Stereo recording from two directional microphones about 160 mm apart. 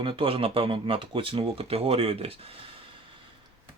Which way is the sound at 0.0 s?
35° right (ahead or behind).